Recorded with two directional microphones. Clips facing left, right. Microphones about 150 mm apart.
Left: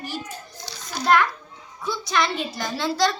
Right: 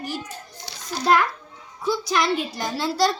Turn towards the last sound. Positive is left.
turn(degrees=-10)  # may be behind; listen again after turning